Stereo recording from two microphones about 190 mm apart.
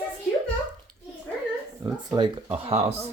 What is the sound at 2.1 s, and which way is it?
Speech, 25° right (ahead or behind).